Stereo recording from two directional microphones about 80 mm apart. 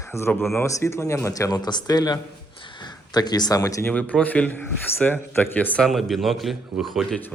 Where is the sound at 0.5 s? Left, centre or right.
Left.